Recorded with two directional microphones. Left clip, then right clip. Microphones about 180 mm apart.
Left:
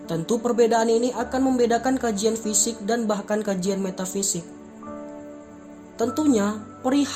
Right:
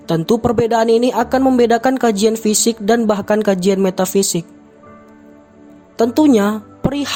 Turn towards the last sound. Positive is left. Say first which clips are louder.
# right 3 dB
turn(degrees=-55)  # may be behind; listen again after turning